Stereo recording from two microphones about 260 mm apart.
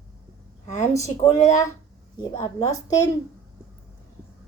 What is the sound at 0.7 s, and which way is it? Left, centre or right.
Speech, left.